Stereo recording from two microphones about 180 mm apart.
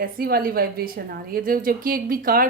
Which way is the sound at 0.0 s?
55° right (ahead or behind).